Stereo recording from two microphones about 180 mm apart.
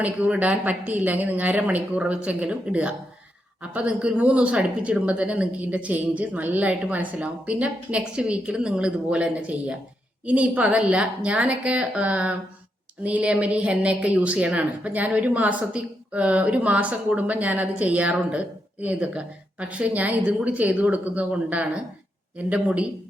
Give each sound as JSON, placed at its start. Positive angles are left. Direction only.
{"t": 0.0, "sound": "a woman's voice", "side_deg": -10}